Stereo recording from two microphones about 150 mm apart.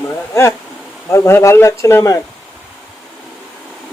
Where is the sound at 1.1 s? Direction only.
20° left (ahead or behind).